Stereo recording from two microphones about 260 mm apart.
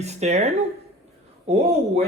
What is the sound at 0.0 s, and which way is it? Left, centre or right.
Speech, right.